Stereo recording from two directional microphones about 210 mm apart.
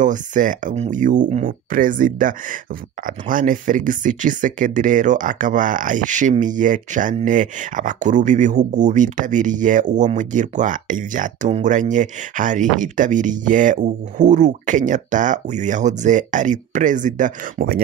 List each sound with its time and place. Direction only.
0.0 s speech: 35° right (ahead or behind)